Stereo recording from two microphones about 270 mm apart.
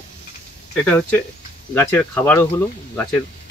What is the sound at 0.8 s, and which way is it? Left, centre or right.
Speech, centre.